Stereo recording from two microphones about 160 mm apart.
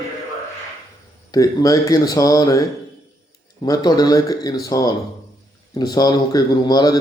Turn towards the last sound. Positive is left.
turn(degrees=25)  # may be behind; listen again after turning